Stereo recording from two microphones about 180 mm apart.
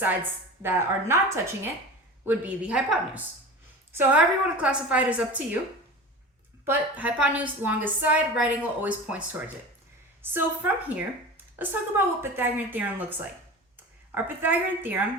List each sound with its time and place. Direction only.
0.0 s a woman's voice: 10° right (ahead or behind)
6.7 s a woman's voice: 10° right (ahead or behind)